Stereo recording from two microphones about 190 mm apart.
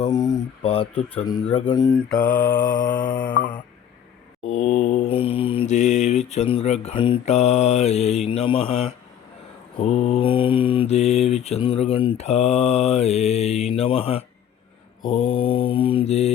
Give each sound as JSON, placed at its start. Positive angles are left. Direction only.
{"t": 0.0, "sound": "mantra", "side_deg": 20}
{"t": 2.1, "sound": "music", "side_deg": 45}
{"t": 4.4, "sound": "mantra", "side_deg": 35}